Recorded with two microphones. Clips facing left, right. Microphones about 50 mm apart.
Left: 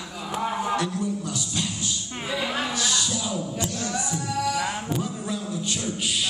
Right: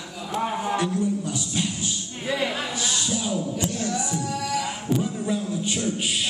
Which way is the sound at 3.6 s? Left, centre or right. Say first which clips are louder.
Right 2 dB; right.